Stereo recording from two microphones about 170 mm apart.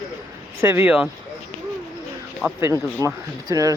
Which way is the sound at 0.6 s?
15° right (ahead or behind).